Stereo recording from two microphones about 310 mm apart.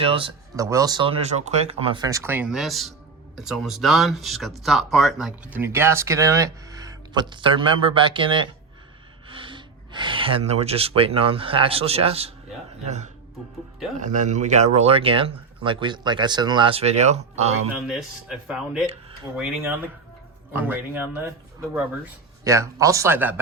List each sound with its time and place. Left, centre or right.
0.0 s speech: centre
17.8 s speech: centre